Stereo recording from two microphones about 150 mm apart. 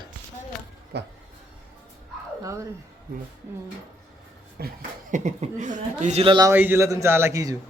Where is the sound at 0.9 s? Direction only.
90° right.